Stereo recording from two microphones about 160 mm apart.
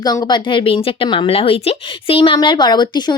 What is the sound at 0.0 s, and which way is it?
A woman's voice, 25° left (ahead or behind).